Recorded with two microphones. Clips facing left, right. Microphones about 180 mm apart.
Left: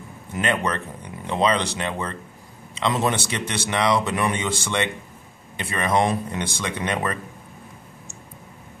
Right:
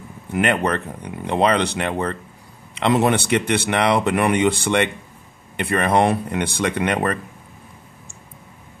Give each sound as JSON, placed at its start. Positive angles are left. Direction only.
{"t": 0.3, "sound": "speech", "side_deg": -60}